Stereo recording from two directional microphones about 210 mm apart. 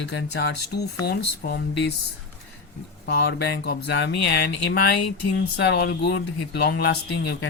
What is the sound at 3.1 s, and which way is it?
Speech, 50° left (ahead or behind).